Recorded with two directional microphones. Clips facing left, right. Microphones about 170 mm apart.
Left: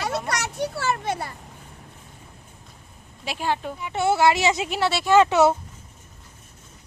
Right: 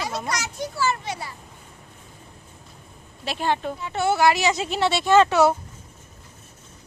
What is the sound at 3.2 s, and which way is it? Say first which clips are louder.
Speech: right 2 dB; 10° left (ahead or behind).